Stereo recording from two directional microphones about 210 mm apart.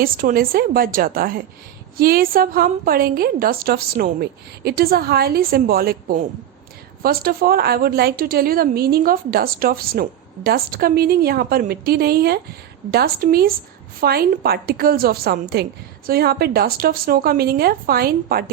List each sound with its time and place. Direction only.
0.0 s a woman's voice: 45° right (ahead or behind)